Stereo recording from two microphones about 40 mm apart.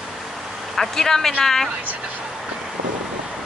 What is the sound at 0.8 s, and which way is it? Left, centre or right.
Speech, centre.